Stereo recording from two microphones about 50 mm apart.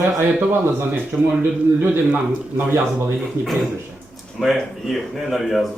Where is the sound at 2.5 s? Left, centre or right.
Right.